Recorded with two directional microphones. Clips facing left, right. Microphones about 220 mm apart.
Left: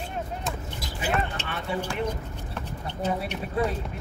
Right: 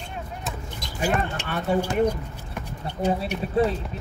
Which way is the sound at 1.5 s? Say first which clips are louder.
Right 6 dB; 45° right (ahead or behind).